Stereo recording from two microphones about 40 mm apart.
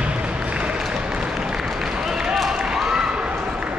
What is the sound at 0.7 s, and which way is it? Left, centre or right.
Applause, centre.